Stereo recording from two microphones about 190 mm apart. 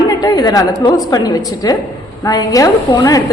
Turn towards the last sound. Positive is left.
turn(degrees=20)  # may be behind; listen again after turning